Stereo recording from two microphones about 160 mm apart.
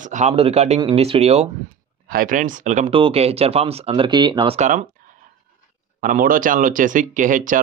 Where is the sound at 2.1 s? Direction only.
60° right (ahead or behind).